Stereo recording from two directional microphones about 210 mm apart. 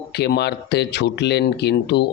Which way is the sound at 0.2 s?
50° left (ahead or behind).